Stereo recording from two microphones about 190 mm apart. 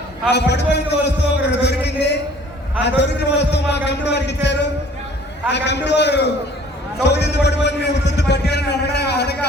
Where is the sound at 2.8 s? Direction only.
65° left (ahead or behind).